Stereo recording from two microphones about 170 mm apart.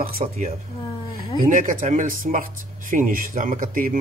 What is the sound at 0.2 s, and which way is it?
Speech, 40° right (ahead or behind).